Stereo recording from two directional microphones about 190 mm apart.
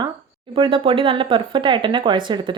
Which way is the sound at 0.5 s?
25° right (ahead or behind).